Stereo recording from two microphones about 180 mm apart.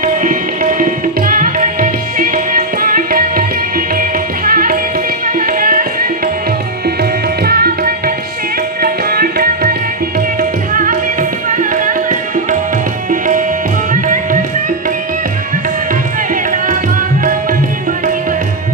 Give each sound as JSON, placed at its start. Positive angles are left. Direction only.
{"t": 0.0, "sound": "tabla", "side_deg": -45}
{"t": 4.4, "sound": "music", "side_deg": -50}
{"t": 5.2, "sound": "tabla", "side_deg": -50}
{"t": 10.8, "sound": "tabla", "side_deg": -50}
{"t": 13.9, "sound": "music", "side_deg": -50}
{"t": 16.3, "sound": "music", "side_deg": -45}